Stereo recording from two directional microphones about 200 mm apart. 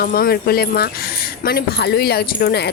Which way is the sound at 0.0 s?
50° left (ahead or behind).